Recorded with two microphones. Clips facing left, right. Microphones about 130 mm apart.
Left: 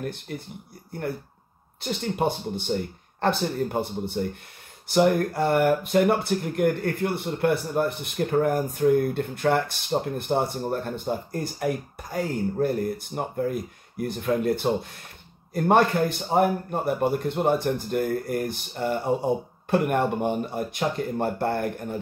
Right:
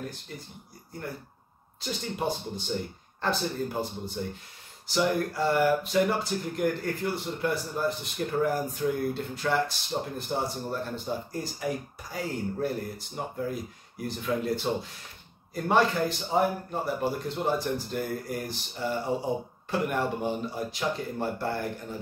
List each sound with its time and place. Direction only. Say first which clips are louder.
0.0 s speech: left 6 dB; 60° left (ahead or behind)
1.8 s speech: left 6 dB; 55° left (ahead or behind)